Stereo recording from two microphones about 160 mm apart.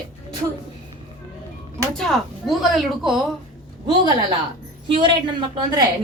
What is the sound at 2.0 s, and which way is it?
Speech, centre (ahead or behind).